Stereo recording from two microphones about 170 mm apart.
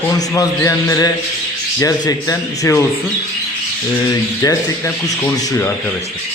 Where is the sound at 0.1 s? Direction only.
20° left (ahead or behind).